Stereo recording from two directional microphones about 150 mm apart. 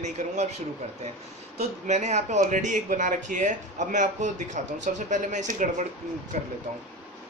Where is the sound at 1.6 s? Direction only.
50° right (ahead or behind).